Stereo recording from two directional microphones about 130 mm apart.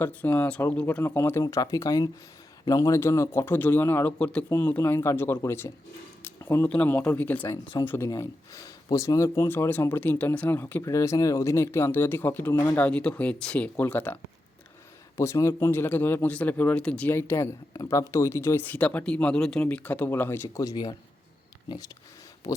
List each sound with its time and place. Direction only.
0.0 s speech: 10° left (ahead or behind)
17.1 s speech: 20° left (ahead or behind)